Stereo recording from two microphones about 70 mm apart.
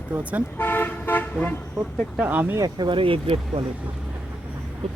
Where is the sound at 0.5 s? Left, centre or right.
Left.